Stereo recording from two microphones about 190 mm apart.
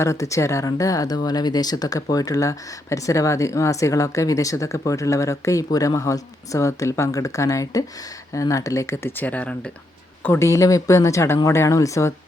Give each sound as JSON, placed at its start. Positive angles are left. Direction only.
{"t": 0.0, "sound": "speech", "side_deg": 15}